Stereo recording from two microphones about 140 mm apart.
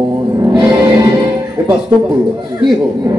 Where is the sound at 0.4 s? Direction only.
30° right (ahead or behind).